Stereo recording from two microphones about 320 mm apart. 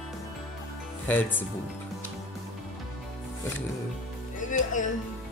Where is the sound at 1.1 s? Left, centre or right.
Centre.